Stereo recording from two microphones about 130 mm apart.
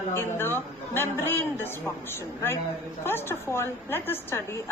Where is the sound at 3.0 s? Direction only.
15° left (ahead or behind).